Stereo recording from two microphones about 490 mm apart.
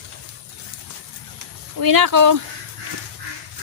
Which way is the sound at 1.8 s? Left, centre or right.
Right.